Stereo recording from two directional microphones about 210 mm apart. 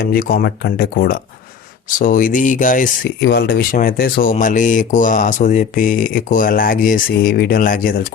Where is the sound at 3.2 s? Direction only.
50° left (ahead or behind).